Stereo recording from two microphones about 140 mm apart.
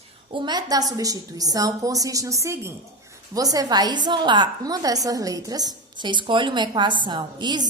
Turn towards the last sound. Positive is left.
turn(degrees=-30)  # may be behind; listen again after turning